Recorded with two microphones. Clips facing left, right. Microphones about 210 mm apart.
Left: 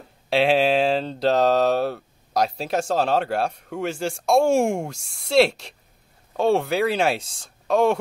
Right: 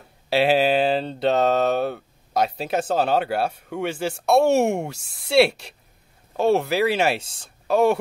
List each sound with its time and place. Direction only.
0.3 s speech: 5° right (ahead or behind)